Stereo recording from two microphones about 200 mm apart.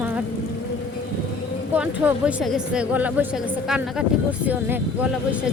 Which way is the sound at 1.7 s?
5° right (ahead or behind).